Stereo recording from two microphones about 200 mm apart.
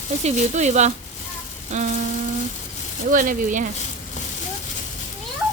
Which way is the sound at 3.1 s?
45° right (ahead or behind).